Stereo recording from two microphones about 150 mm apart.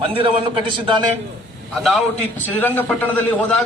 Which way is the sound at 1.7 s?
Centre (ahead or behind).